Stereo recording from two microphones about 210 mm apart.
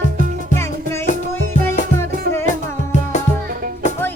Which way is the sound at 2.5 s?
35° left (ahead or behind).